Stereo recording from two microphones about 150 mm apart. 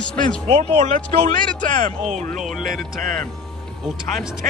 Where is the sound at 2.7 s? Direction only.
70° right (ahead or behind).